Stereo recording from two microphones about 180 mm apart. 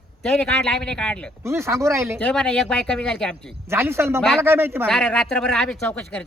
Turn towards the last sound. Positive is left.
turn(degrees=10)  # may be behind; listen again after turning